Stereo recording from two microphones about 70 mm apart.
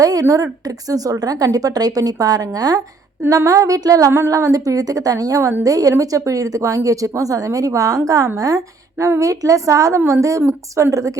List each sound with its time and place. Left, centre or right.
0.0 s a woman's voice: right